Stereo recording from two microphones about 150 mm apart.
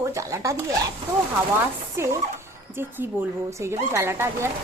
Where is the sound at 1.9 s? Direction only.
20° right (ahead or behind).